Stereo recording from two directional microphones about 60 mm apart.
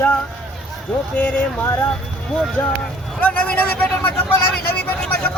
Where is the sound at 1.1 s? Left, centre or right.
Left.